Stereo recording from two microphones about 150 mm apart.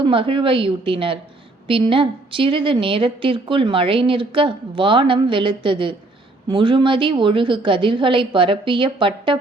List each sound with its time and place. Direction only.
0.0 s a woman's voice: 35° right (ahead or behind)